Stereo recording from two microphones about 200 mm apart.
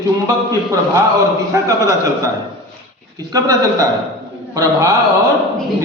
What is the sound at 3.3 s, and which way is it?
A man's voice, 15° right (ahead or behind).